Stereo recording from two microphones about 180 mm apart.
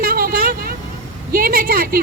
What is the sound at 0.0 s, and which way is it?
Vehicle, 55° right (ahead or behind).